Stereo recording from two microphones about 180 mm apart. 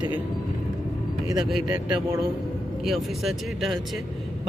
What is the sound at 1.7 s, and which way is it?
Speech, 20° right (ahead or behind).